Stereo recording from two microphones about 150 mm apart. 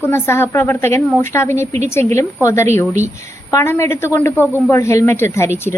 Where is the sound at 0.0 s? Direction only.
15° left (ahead or behind).